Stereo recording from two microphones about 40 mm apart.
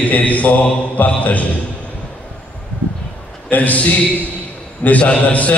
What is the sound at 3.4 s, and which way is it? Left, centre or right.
Mantra, left.